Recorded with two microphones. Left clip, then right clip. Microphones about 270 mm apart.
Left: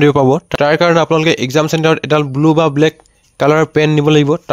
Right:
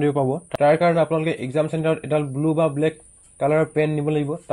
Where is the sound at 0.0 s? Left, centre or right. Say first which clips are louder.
Left 11 dB; left.